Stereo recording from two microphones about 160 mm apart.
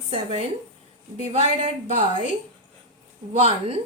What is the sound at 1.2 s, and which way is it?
Speech, 45° right (ahead or behind).